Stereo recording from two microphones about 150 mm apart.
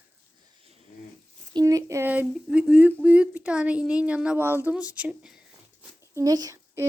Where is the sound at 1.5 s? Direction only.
20° right (ahead or behind); by 5.3 s 5° right (ahead or behind).